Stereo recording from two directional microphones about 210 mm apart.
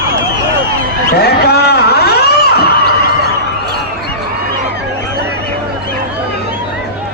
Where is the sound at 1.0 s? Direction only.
50° left (ahead or behind).